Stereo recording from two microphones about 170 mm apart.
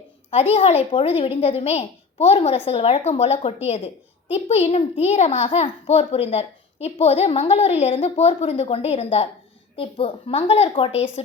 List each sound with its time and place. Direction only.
0.3 s a child's voice: 35° left (ahead or behind)